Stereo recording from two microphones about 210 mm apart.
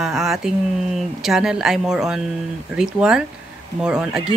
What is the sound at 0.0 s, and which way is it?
Speech, centre (ahead or behind).